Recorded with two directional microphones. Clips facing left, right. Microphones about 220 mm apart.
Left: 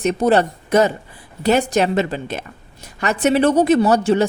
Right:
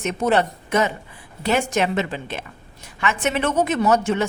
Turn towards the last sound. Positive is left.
turn(degrees=35)  # may be behind; listen again after turning